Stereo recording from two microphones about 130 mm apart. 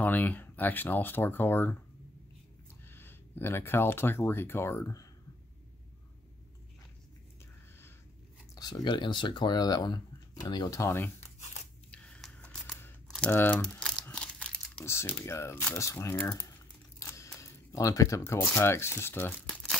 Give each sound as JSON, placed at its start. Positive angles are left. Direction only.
{"t": 0.0, "sound": "speech", "side_deg": 15}
{"t": 2.8, "sound": "speech", "side_deg": 15}
{"t": 8.5, "sound": "speech", "side_deg": 30}
{"t": 11.3, "sound": "tearing", "side_deg": 60}
{"t": 11.9, "sound": "scissors", "side_deg": 10}
{"t": 13.3, "sound": "speech", "side_deg": 15}
{"t": 13.6, "sound": "crumpling", "side_deg": 5}
{"t": 14.9, "sound": "speech", "side_deg": 20}